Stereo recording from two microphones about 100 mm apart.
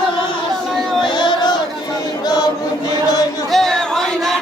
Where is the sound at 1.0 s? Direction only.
50° left (ahead or behind).